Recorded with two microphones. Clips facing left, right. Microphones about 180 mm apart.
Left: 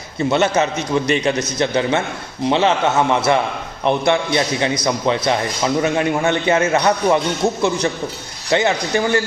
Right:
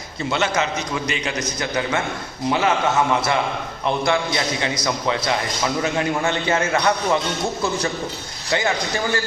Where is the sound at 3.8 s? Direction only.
20° left (ahead or behind).